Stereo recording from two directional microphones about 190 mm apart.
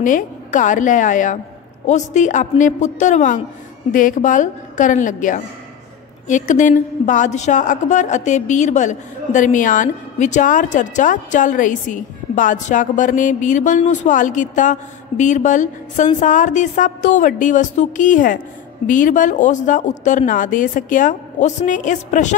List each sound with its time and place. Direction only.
0.0 s a woman's voice: 45° left (ahead or behind)